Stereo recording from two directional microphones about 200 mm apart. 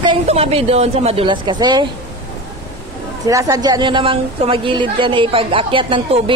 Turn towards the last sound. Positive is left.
turn(degrees=-25)  # may be behind; listen again after turning